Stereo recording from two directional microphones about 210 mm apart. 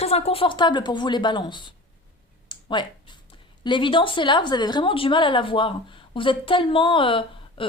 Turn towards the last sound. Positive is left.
turn(degrees=25)  # may be behind; listen again after turning